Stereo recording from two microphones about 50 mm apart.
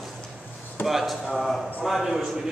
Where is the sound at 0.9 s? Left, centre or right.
Centre.